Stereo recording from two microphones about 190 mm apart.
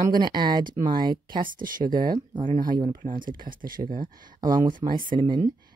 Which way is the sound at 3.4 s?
45° right (ahead or behind).